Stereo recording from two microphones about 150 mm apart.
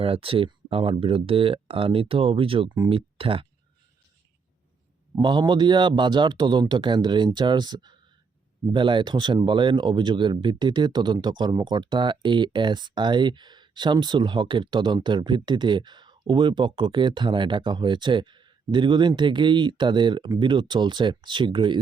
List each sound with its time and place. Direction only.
0.0 s speech: 40° right (ahead or behind)
5.1 s speech: 30° right (ahead or behind)